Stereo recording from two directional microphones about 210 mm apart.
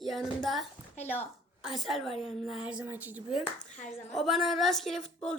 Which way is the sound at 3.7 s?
35° left (ahead or behind).